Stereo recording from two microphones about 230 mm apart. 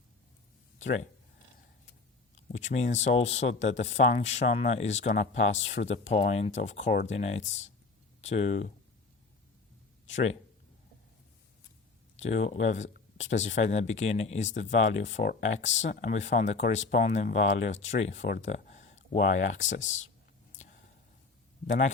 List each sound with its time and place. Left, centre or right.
2.3 s speech: left
12.2 s speech: left